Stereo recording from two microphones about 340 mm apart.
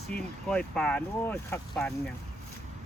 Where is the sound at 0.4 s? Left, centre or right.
Centre.